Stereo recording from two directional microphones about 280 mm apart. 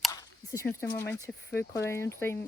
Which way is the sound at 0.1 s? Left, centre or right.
Centre.